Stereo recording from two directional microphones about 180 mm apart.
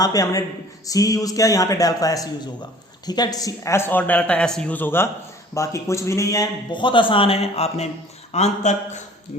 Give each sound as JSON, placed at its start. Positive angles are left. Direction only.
{"t": 0.0, "sound": "a man's voice", "side_deg": 20}